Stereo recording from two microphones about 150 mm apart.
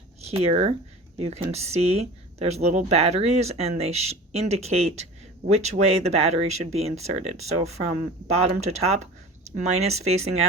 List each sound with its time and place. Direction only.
0.2 s speech: 45° right (ahead or behind)